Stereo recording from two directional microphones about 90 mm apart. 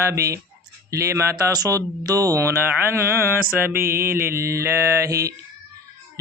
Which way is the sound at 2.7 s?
25° right (ahead or behind).